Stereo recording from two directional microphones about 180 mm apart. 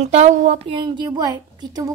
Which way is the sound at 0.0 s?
40° right (ahead or behind).